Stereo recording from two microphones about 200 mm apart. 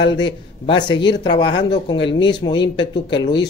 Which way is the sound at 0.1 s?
25° left (ahead or behind).